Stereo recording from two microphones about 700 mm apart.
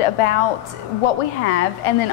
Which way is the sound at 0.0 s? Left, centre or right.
Left.